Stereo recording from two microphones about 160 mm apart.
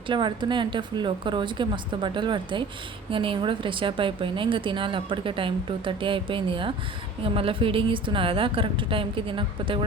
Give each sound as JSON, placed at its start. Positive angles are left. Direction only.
{"t": 0.1, "sound": "a woman's voice", "side_deg": -30}